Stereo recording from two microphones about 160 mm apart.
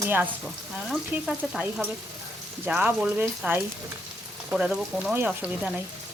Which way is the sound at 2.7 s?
5° right (ahead or behind).